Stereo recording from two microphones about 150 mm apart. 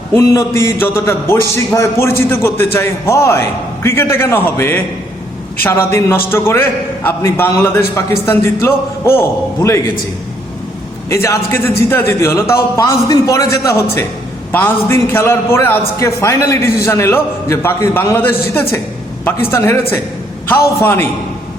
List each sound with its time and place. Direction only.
0.1 s a man's voice: 20° left (ahead or behind)
11.1 s a man's voice: 20° left (ahead or behind)